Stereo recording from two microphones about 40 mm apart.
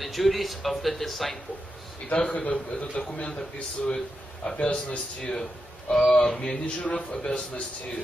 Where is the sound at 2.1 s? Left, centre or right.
Left.